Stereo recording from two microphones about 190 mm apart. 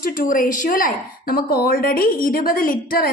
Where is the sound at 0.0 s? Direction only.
45° left (ahead or behind).